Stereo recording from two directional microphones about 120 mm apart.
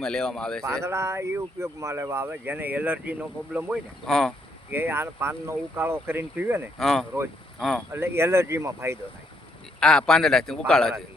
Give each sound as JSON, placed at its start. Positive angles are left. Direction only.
{"t": 0.0, "sound": "a man's voice", "side_deg": 5}
{"t": 0.9, "sound": "speech", "side_deg": -25}
{"t": 4.0, "sound": "a man's voice", "side_deg": 5}
{"t": 4.7, "sound": "speech", "side_deg": -15}
{"t": 6.7, "sound": "a man's voice", "side_deg": 0}
{"t": 7.9, "sound": "speech", "side_deg": -20}
{"t": 9.8, "sound": "a man's voice", "side_deg": 5}